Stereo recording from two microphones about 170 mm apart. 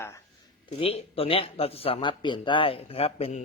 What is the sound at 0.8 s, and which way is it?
Speech, 35° left (ahead or behind).